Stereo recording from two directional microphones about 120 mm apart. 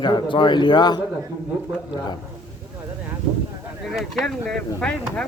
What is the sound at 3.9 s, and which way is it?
Speech, centre (ahead or behind).